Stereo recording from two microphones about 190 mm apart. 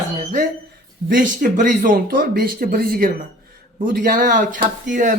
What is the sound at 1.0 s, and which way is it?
Speech, 45° right (ahead or behind).